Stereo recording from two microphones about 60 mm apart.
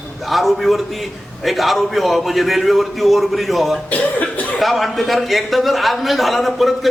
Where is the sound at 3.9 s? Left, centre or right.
Left.